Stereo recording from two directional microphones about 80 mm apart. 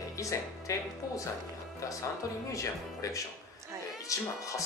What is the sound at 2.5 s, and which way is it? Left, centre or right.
Speech, left.